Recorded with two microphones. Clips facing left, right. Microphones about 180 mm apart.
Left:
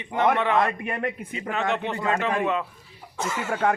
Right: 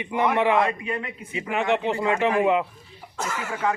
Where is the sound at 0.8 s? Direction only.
55° left (ahead or behind).